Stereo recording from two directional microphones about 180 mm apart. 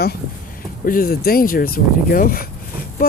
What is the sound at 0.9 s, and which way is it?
Speech, 55° left (ahead or behind).